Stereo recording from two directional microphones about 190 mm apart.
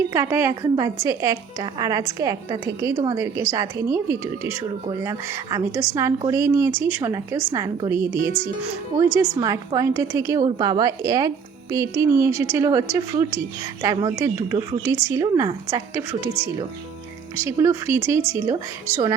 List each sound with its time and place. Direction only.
0.1 s a woman's voice: 15° right (ahead or behind)
8.2 s speech: 25° left (ahead or behind)
9.4 s a woman's voice: 20° right (ahead or behind)